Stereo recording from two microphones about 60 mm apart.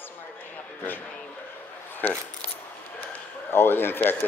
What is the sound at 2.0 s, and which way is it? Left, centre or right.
Speech, left.